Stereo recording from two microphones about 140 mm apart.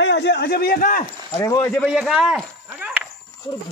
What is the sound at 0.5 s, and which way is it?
Speech, 90° left.